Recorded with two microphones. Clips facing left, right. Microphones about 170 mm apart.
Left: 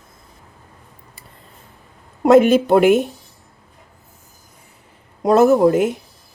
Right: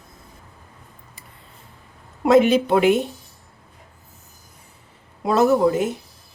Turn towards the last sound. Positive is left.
turn(degrees=55)  # may be behind; listen again after turning